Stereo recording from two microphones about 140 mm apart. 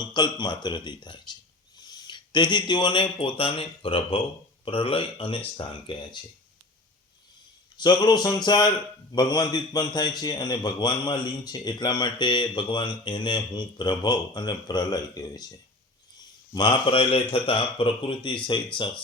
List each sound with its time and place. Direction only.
0.0 s a man's voice: 30° left (ahead or behind)
7.8 s jingle bell: 30° left (ahead or behind)
9.1 s a man's voice: 30° left (ahead or behind)
16.6 s a man's voice: 35° left (ahead or behind)